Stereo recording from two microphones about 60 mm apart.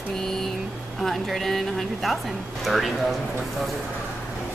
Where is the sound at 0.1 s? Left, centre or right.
Centre.